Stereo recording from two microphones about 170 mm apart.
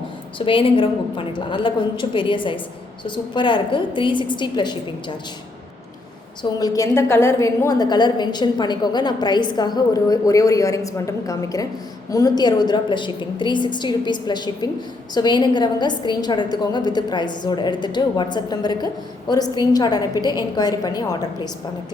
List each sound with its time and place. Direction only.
0.3 s a woman's voice: 30° left (ahead or behind)
6.4 s a woman's voice: 20° left (ahead or behind)